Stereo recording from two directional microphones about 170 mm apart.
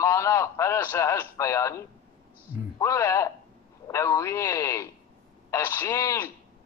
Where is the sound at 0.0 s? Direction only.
15° left (ahead or behind).